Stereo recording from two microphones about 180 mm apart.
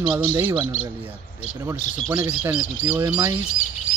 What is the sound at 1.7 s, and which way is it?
Speech, 15° right (ahead or behind).